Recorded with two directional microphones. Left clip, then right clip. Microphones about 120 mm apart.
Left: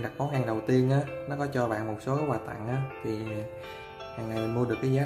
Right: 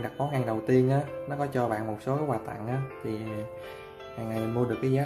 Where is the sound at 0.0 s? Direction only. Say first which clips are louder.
Right 1 dB; 15° right (ahead or behind).